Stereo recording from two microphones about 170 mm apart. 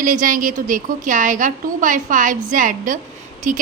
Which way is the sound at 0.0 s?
50° right (ahead or behind).